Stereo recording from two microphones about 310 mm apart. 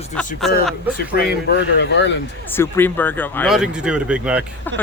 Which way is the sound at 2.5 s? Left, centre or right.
Centre.